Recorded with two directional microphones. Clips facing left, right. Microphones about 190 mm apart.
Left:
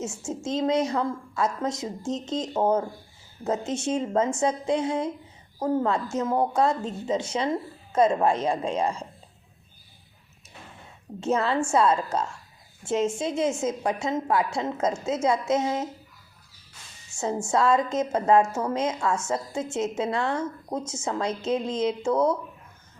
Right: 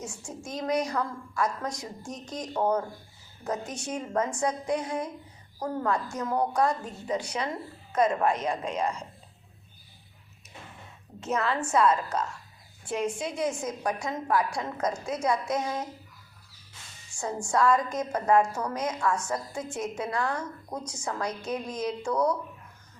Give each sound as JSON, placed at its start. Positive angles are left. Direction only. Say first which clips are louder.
{"t": 0.0, "sound": "a woman's voice", "louder": "left 8 dB", "side_deg": 25}
{"t": 11.2, "sound": "a woman's voice", "louder": "left 4 dB", "side_deg": 30}
{"t": 17.1, "sound": "a woman's voice", "louder": "left 4 dB", "side_deg": 25}